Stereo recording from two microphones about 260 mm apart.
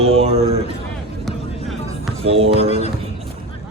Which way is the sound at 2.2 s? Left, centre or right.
Right.